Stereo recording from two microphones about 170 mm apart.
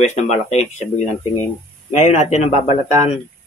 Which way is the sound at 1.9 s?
40° left (ahead or behind).